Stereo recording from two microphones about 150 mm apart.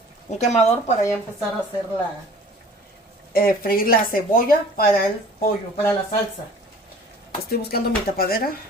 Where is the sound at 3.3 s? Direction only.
75° left (ahead or behind).